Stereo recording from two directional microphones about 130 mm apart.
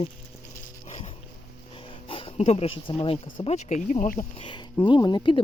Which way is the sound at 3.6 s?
65° left (ahead or behind).